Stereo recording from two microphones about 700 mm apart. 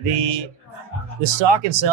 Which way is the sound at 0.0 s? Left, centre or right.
Right.